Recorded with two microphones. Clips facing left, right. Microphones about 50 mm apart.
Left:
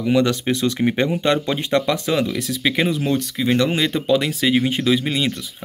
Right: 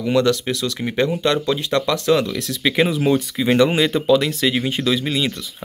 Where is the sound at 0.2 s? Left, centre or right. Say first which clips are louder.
Even; left.